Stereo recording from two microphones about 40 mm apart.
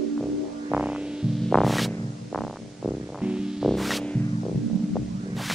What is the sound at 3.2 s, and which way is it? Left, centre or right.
Music, right.